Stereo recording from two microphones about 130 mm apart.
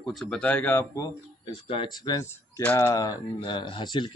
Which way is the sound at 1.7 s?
40° left (ahead or behind).